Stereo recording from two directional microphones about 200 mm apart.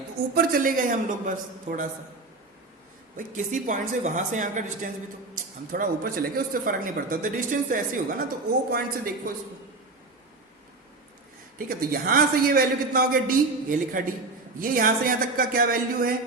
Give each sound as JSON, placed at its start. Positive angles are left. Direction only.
{"t": 0.3, "sound": "speech", "side_deg": -45}
{"t": 3.2, "sound": "speech", "side_deg": -40}
{"t": 11.5, "sound": "speech", "side_deg": -45}